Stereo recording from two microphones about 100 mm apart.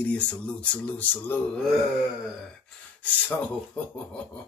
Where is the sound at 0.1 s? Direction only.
15° left (ahead or behind).